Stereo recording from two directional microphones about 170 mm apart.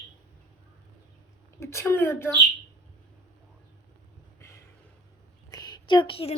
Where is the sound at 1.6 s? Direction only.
15° left (ahead or behind).